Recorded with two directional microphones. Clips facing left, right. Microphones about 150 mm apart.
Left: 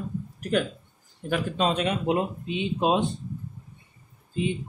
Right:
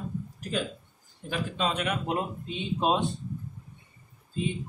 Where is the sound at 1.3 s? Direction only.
35° left (ahead or behind).